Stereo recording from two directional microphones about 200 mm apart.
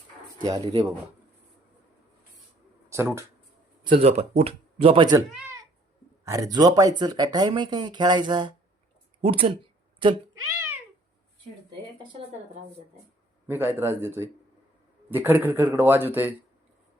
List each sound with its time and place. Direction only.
0.4 s speech: 20° right (ahead or behind)
3.8 s speech: 30° right (ahead or behind)
6.2 s a man's voice: 15° right (ahead or behind)
13.5 s a man's voice: 10° right (ahead or behind)